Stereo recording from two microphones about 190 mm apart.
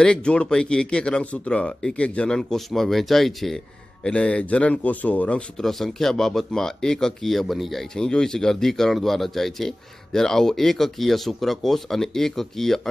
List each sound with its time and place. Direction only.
0.0 s speech: 5° left (ahead or behind)